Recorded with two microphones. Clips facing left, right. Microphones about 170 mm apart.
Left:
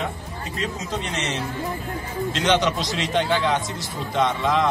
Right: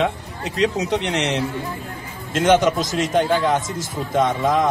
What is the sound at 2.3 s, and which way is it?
A man's voice, 50° right (ahead or behind).